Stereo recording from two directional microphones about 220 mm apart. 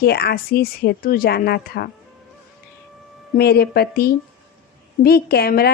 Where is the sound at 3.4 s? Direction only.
45° left (ahead or behind).